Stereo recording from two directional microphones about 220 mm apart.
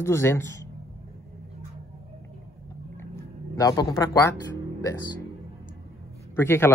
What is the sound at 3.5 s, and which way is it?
Speech, 15° left (ahead or behind).